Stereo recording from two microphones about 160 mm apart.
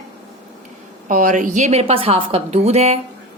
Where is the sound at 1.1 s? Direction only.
55° right (ahead or behind).